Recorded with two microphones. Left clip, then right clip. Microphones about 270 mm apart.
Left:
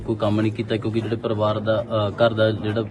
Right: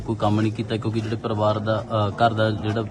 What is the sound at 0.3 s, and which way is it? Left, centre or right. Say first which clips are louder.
A man's voice: even; centre.